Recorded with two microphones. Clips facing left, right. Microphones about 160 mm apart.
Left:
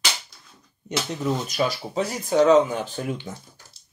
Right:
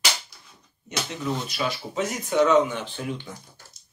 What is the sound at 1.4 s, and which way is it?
Speech, 40° left (ahead or behind).